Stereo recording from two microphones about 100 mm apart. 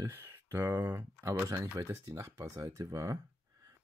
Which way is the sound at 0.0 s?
25° right (ahead or behind).